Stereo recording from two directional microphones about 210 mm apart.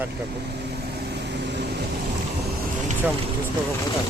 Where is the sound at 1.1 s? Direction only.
55° right (ahead or behind).